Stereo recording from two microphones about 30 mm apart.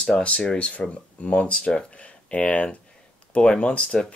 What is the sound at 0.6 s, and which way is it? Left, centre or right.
Speech, left.